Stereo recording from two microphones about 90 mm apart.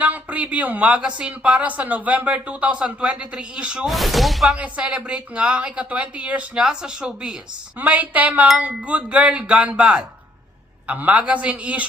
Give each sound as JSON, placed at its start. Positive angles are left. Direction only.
{"t": 0.0, "sound": "speech", "side_deg": -15}
{"t": 3.8, "sound": "speech", "side_deg": 0}
{"t": 4.5, "sound": "speech", "side_deg": -15}
{"t": 10.8, "sound": "speech", "side_deg": -15}